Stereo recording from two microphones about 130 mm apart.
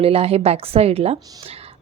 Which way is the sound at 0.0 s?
50° right (ahead or behind).